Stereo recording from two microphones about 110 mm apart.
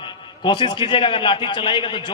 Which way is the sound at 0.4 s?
45° left (ahead or behind).